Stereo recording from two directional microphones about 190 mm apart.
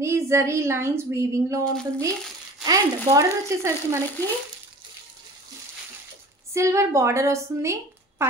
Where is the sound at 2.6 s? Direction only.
20° right (ahead or behind).